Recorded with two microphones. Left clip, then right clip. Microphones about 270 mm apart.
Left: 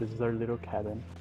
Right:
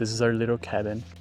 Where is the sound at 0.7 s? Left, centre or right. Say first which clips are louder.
Right 4 dB; right.